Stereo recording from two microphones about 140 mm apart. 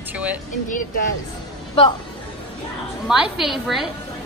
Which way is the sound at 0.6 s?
70° left (ahead or behind).